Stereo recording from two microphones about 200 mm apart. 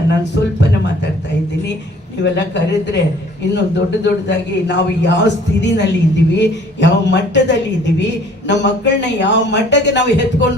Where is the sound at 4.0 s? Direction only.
60° left (ahead or behind).